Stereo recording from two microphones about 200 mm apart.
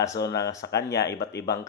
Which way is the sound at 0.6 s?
55° left (ahead or behind).